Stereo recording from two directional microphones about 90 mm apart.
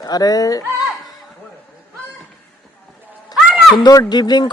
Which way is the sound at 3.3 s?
45° left (ahead or behind).